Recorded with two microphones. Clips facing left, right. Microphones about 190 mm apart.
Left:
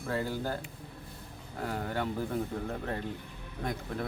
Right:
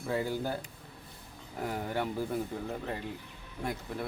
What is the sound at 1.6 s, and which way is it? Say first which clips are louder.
Speech: even; 15° right (ahead or behind).